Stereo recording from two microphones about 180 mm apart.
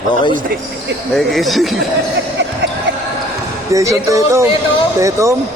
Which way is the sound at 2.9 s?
85° right.